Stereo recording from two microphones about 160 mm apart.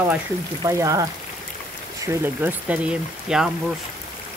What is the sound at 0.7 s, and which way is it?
Speech, 20° right (ahead or behind).